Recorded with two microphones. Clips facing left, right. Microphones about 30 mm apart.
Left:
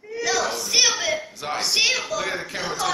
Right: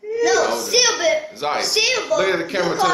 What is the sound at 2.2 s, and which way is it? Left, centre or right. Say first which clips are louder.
Speech: right 8 dB; right.